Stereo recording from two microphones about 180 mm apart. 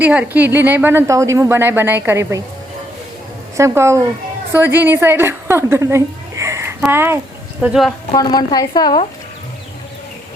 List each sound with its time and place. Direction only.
0.0 s a woman's voice: 10° right (ahead or behind)
3.6 s a woman's voice: 15° right (ahead or behind)
7.6 s a woman's voice: centre (ahead or behind)
8.1 s a woman's voice: 20° left (ahead or behind)